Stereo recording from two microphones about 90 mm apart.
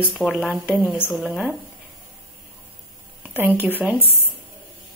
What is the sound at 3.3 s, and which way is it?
Speech, 20° right (ahead or behind).